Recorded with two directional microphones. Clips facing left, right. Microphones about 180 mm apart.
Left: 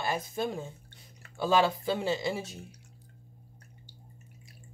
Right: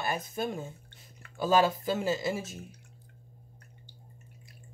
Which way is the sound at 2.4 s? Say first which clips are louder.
Even; 30° left (ahead or behind).